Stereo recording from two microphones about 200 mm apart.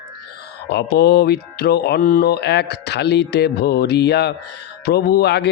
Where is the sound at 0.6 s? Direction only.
55° left (ahead or behind).